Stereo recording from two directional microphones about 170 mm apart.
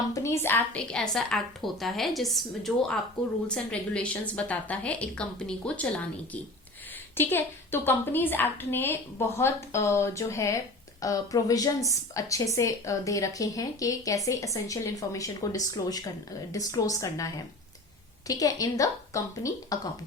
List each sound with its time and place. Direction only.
0.1 s a woman's voice: 15° left (ahead or behind)
7.2 s a woman's voice: 10° left (ahead or behind)